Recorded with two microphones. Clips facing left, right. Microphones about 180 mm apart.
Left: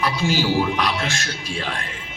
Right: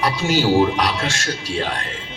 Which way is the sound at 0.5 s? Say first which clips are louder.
Right 5 dB; 35° right (ahead or behind).